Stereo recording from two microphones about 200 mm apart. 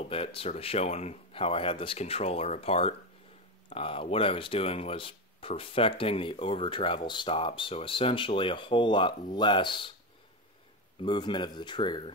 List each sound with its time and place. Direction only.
0.1 s speech: 30° left (ahead or behind)
11.0 s speech: 25° left (ahead or behind)